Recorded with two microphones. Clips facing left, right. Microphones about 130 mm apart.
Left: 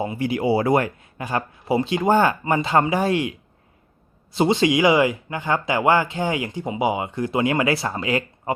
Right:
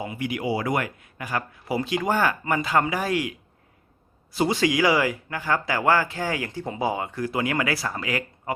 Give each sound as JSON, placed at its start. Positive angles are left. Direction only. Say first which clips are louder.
{"t": 0.0, "sound": "speech", "louder": "left 6 dB", "side_deg": 30}